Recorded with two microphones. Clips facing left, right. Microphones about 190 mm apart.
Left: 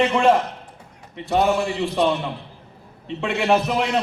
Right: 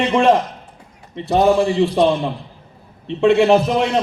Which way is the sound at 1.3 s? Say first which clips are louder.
Right 5 dB; 35° right (ahead or behind).